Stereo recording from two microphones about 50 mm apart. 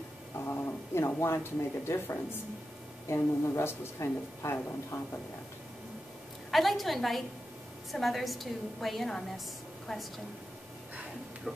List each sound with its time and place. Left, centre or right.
0.4 s speech: left
3.1 s a woman's voice: left
6.5 s a woman's voice: centre
11.5 s speech: centre